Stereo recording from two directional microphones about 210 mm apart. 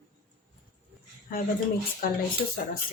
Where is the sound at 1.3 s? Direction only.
40° left (ahead or behind).